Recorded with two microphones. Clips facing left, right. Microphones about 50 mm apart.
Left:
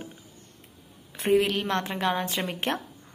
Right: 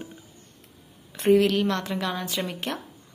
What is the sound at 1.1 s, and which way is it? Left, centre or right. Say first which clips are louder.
Speech: right 4 dB; centre.